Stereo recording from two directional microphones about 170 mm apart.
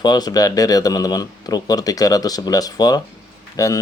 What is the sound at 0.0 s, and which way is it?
Speech, 25° left (ahead or behind).